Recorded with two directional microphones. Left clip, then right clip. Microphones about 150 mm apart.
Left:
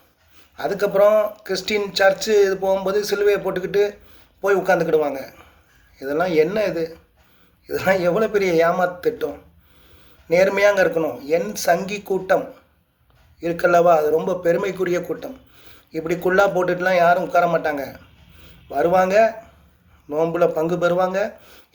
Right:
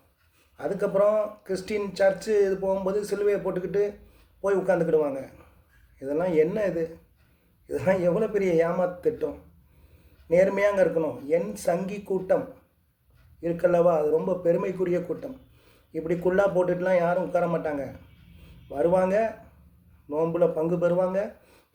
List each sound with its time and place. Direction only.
0.5 s a man's voice: 15° right (ahead or behind)
10.2 s speech: 20° right (ahead or behind)
13.4 s a man's voice: 15° right (ahead or behind)